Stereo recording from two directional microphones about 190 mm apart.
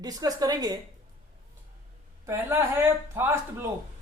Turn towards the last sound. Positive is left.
turn(degrees=-10)  # may be behind; listen again after turning